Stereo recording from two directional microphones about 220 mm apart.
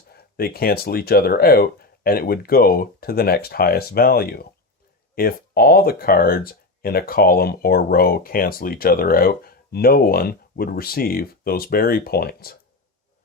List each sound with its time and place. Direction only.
0.1 s speech: 45° left (ahead or behind)